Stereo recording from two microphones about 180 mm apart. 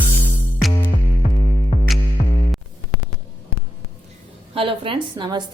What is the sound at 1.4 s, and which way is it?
Music, 45° left (ahead or behind).